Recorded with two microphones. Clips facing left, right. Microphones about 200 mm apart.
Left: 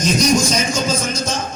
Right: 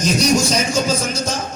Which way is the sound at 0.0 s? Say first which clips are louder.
Even; 35° right (ahead or behind).